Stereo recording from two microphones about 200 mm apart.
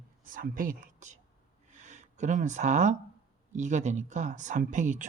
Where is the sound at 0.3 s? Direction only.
45° right (ahead or behind).